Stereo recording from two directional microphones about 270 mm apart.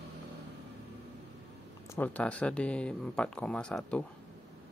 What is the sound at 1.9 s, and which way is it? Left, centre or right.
Speech, centre.